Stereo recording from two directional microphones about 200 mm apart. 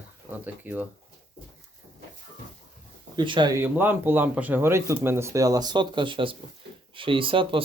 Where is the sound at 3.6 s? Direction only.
10° right (ahead or behind).